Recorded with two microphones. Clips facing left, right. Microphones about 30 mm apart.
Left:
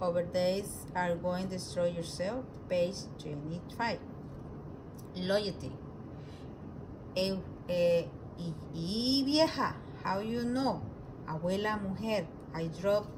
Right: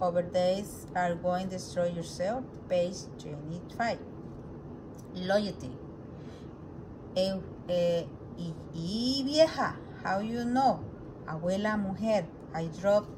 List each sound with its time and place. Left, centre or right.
0.3 s a woman's voice: centre
3.7 s a woman's voice: centre
5.1 s a woman's voice: left
7.2 s a woman's voice: left